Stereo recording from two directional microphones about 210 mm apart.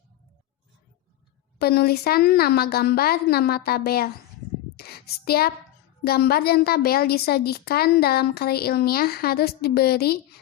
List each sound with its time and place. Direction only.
1.5 s a woman's voice: 50° left (ahead or behind)
4.8 s a sound: 50° left (ahead or behind)
6.1 s a woman's voice: 50° left (ahead or behind)